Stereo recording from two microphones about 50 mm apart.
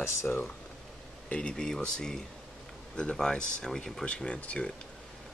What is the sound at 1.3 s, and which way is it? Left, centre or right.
Speech, centre.